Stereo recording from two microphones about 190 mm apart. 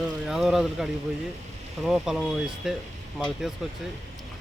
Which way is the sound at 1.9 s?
Centre (ahead or behind).